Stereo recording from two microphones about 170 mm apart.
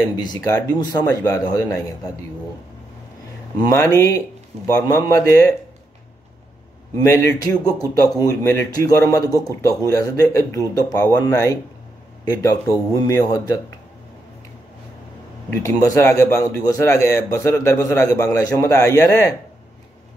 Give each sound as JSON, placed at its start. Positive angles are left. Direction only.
{"t": 0.0, "sound": "speech", "side_deg": 25}
{"t": 3.6, "sound": "a man's voice", "side_deg": 15}
{"t": 7.0, "sound": "speech", "side_deg": 20}
{"t": 15.5, "sound": "a man's voice", "side_deg": 15}